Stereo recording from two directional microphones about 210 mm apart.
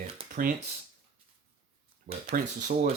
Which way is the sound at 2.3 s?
40° right (ahead or behind).